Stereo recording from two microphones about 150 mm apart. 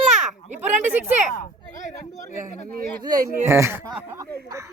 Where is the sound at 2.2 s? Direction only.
55° left (ahead or behind).